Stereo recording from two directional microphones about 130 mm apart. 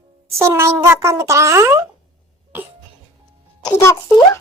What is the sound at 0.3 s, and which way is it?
A child's voice, 20° right (ahead or behind).